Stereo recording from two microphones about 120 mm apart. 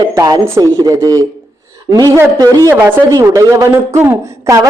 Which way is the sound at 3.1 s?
30° right (ahead or behind).